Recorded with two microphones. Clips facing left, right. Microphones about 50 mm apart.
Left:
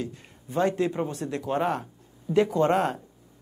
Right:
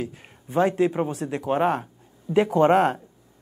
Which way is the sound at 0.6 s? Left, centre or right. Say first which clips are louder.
Right 4 dB; centre.